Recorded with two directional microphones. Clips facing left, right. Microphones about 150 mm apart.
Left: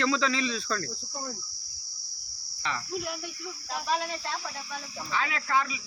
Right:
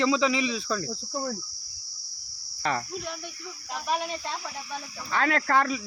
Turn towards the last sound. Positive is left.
turn(degrees=-55)  # may be behind; listen again after turning